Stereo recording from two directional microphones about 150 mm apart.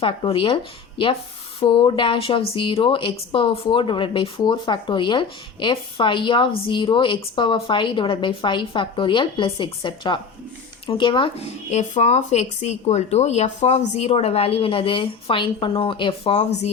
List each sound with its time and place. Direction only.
0.0 s speech: 40° left (ahead or behind)
11.7 s speech: 50° left (ahead or behind)